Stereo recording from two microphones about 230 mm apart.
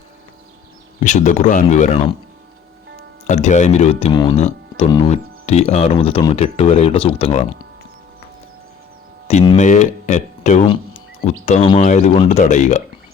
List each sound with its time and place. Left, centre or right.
0.9 s speech: left
3.2 s speech: left
4.1 s speech: centre
9.2 s speech: left